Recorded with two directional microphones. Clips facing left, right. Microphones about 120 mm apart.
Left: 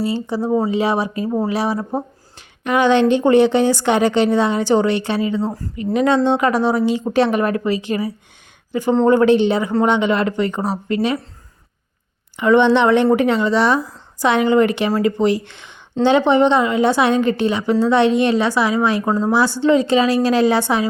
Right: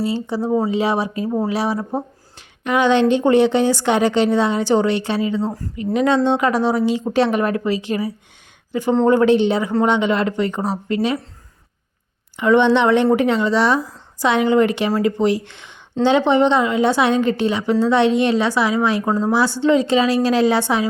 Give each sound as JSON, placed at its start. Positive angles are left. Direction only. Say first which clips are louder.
{"t": 0.0, "sound": "a woman's voice", "louder": "left 1 dB", "side_deg": 45}
{"t": 12.4, "sound": "a woman's voice", "louder": "left 1 dB", "side_deg": 50}